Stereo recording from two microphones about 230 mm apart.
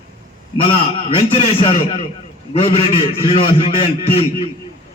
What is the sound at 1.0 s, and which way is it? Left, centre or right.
A man's voice, left.